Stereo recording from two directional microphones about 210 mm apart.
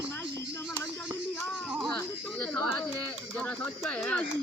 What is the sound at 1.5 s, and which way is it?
Speech, centre (ahead or behind).